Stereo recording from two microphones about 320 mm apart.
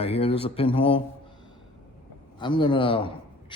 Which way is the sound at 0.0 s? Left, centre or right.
Centre.